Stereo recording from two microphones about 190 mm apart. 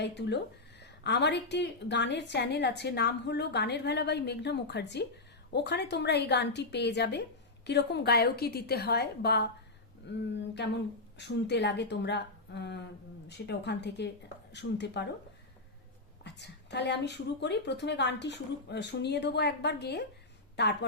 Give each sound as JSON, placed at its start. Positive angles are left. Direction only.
{"t": 0.0, "sound": "speech", "side_deg": 65}
{"t": 10.1, "sound": "a sound", "side_deg": 70}
{"t": 11.2, "sound": "speech", "side_deg": 65}
{"t": 16.2, "sound": "speech", "side_deg": 65}